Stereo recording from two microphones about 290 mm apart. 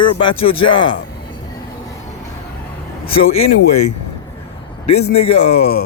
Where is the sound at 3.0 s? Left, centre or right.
Centre.